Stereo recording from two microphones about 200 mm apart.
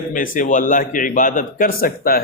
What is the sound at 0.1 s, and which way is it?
A man's voice, 40° left (ahead or behind).